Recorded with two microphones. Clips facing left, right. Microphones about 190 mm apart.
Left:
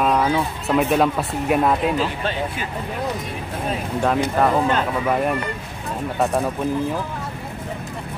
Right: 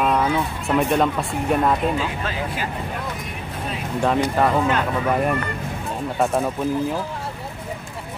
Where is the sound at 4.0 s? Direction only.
Centre (ahead or behind).